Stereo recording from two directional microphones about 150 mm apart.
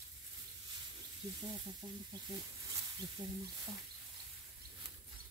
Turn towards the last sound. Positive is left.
turn(degrees=-30)  # may be behind; listen again after turning